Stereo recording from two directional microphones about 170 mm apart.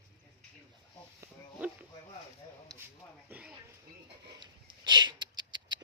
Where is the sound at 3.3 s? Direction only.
10° right (ahead or behind).